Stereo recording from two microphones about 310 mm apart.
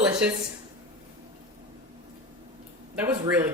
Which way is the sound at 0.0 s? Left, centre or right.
Centre.